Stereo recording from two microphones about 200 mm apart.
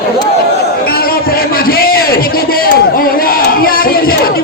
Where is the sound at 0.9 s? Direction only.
50° left (ahead or behind).